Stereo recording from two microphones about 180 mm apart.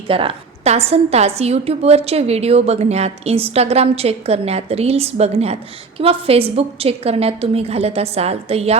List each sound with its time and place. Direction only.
0.1 s a woman's voice: 30° right (ahead or behind)